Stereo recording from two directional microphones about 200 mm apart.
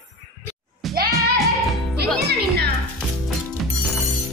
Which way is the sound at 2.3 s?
55° right (ahead or behind).